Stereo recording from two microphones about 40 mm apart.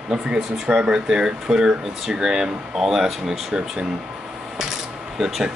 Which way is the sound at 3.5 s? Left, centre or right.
Centre.